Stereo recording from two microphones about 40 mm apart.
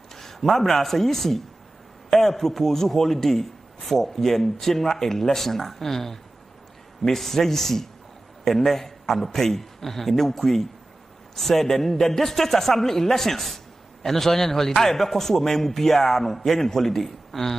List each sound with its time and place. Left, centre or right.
0.1 s a man's voice: centre